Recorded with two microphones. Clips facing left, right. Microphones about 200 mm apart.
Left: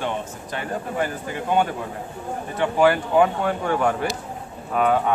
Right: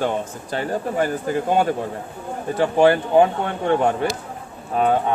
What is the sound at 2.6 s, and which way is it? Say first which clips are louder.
Speech: right 3 dB; 30° right (ahead or behind).